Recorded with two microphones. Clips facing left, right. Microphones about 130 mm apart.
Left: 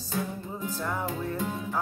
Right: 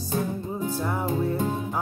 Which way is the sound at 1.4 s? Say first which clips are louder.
Right 5 dB; 35° right (ahead or behind).